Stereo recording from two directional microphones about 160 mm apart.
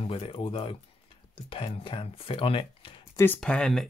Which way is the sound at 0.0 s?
35° left (ahead or behind).